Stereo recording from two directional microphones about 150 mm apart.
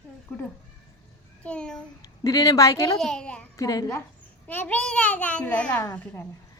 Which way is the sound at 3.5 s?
25° left (ahead or behind).